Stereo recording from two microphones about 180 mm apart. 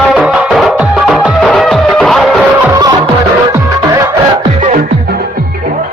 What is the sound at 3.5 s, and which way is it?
Music, 20° right (ahead or behind).